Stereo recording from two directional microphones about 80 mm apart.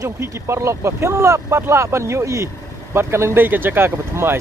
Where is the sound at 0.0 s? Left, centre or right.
Right.